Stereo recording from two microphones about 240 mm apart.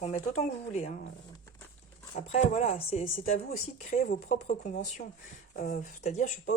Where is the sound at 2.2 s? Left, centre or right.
Left.